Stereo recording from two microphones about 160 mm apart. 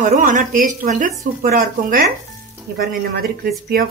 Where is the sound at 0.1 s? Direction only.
55° right (ahead or behind).